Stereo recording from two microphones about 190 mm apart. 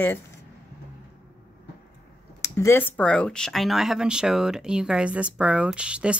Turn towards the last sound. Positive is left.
turn(degrees=-5)  # may be behind; listen again after turning